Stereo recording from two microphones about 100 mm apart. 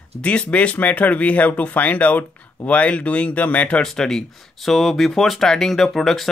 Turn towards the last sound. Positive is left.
turn(degrees=0)  # may be behind; listen again after turning